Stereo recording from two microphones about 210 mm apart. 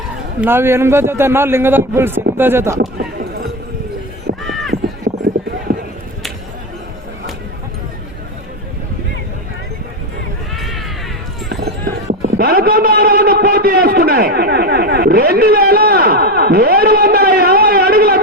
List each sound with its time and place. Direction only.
0.4 s a man's voice: 10° right (ahead or behind)
3.0 s clip-clop: 45° right (ahead or behind)
4.4 s clip-clop: centre (ahead or behind)
4.7 s clip-clop: 45° right (ahead or behind)
5.7 s chop: 35° right (ahead or behind)
10.5 s a sound: centre (ahead or behind)
12.2 s a sound: 45° right (ahead or behind)